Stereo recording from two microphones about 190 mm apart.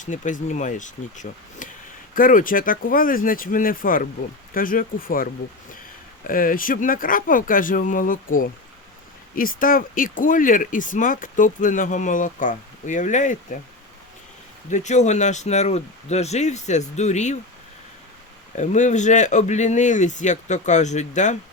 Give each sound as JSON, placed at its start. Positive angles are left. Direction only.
{"t": 0.0, "sound": "speech", "side_deg": 40}
{"t": 14.7, "sound": "speech", "side_deg": 35}
{"t": 18.5, "sound": "speech", "side_deg": 40}